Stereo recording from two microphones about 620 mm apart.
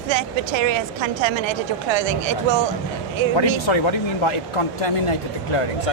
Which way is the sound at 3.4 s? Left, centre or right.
Left.